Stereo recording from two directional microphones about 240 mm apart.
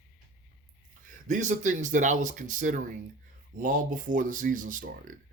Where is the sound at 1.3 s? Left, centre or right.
Right.